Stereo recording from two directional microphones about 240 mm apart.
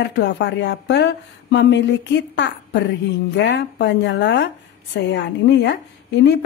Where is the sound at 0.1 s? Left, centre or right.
Left.